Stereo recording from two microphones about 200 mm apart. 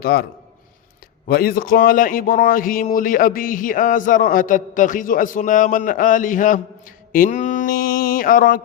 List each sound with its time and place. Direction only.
0.0 s a man's voice: 50° left (ahead or behind)
1.3 s a man's voice: 50° left (ahead or behind)